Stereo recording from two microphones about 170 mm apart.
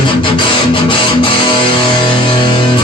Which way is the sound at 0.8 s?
30° left (ahead or behind).